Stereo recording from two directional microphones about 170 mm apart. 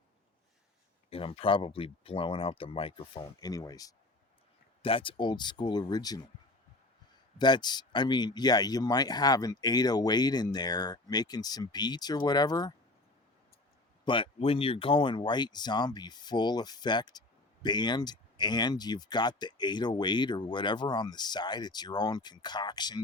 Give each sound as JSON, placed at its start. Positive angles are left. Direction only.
{"t": 1.1, "sound": "speech", "side_deg": 30}
{"t": 4.8, "sound": "speech", "side_deg": 30}
{"t": 7.3, "sound": "speech", "side_deg": 25}
{"t": 14.0, "sound": "speech", "side_deg": 30}